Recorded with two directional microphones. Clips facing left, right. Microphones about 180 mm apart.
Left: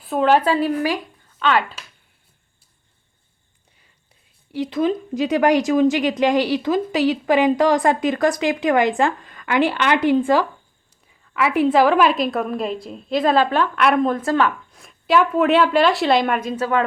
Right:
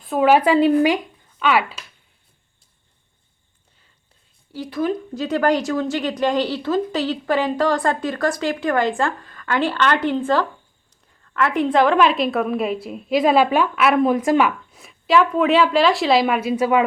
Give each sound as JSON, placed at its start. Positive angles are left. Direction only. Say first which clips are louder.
{"t": 0.0, "sound": "a woman's voice", "louder": "right 1 dB", "side_deg": -5}
{"t": 1.4, "sound": "speech", "louder": "even", "side_deg": -10}
{"t": 4.5, "sound": "a woman's voice", "louder": "left 2 dB", "side_deg": 20}